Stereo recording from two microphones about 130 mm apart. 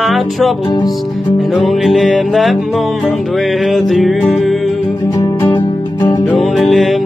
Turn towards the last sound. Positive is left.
turn(degrees=0)  # may be behind; listen again after turning